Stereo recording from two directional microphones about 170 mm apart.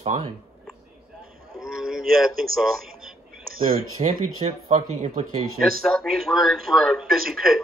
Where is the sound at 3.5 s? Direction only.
60° right (ahead or behind).